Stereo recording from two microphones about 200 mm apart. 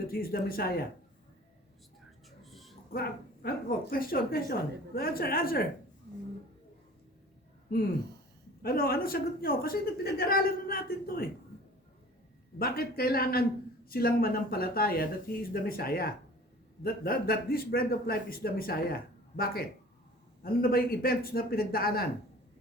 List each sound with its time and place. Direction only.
0.1 s speech: 50° left (ahead or behind)
2.4 s music: centre (ahead or behind)
2.9 s speech: 50° left (ahead or behind)
8.6 s speech: 50° left (ahead or behind)
12.5 s speech: 50° left (ahead or behind)